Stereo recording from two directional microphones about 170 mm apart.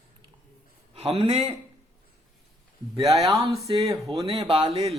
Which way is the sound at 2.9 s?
20° right (ahead or behind).